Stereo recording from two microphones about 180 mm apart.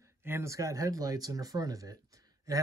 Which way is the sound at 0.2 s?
15° right (ahead or behind).